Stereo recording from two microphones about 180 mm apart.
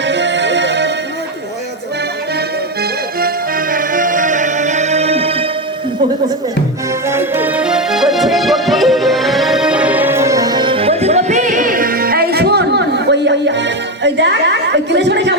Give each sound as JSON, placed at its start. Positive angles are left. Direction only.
{"t": 0.0, "sound": "music", "side_deg": -80}
{"t": 3.2, "sound": "music", "side_deg": -55}
{"t": 7.1, "sound": "music", "side_deg": -10}